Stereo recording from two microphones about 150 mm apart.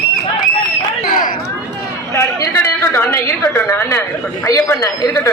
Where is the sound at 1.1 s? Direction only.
60° left (ahead or behind).